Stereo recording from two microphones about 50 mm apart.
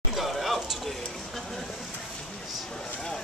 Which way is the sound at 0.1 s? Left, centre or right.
Centre.